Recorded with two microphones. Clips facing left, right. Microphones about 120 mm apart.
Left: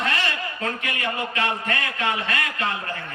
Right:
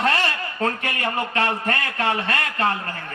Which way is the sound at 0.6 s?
40° right (ahead or behind).